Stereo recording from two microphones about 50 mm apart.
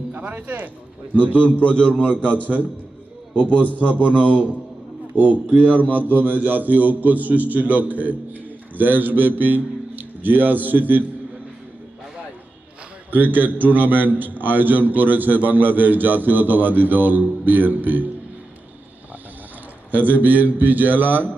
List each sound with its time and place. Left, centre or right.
0.1 s a man's voice: right
3.3 s a man's voice: left
3.8 s a man's voice: right
13.1 s a man's voice: right
19.9 s a man's voice: right